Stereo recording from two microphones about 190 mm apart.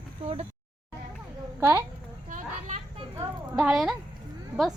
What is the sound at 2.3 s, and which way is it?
Children playing, 40° right (ahead or behind).